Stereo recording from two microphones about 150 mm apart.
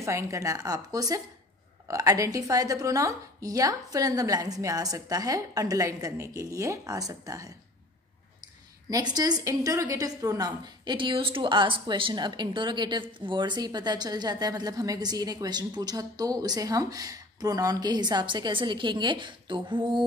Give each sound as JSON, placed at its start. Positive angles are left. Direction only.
{"t": 0.0, "sound": "a woman's voice", "side_deg": -20}
{"t": 8.8, "sound": "a woman's voice", "side_deg": -25}